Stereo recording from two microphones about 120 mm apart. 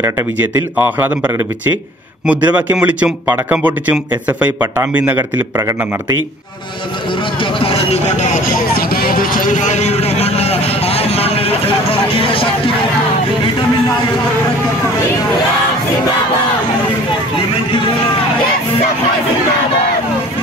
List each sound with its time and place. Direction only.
0.0 s speech: 15° right (ahead or behind)
5.6 s a man's voice: 25° right (ahead or behind)
7.6 s speech: 60° left (ahead or behind)
9.5 s speech: 85° left; by 12.7 s 50° left (ahead or behind)